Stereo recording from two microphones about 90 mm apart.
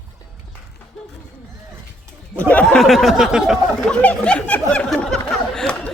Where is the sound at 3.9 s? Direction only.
15° left (ahead or behind).